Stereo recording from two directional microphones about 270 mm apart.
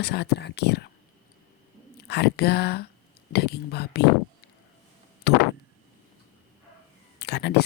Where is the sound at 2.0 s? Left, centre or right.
Left.